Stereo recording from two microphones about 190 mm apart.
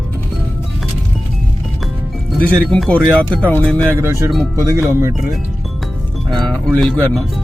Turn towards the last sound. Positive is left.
turn(degrees=0)  # may be behind; listen again after turning